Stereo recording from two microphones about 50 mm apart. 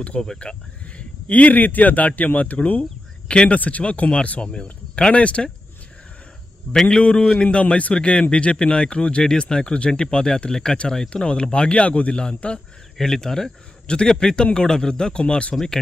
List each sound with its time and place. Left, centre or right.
0.0 s speech: left
6.9 s speech: centre
12.9 s speech: centre